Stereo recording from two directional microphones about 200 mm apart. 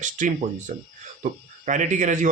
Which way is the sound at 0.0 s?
40° right (ahead or behind).